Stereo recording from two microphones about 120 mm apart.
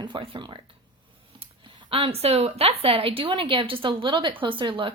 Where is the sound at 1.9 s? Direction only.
50° right (ahead or behind).